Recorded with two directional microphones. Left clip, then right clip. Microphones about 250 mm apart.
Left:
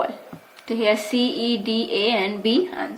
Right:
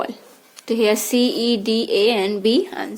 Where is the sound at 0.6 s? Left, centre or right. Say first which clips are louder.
Right 2 dB; right.